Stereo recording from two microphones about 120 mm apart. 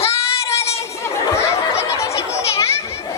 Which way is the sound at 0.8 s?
25° left (ahead or behind).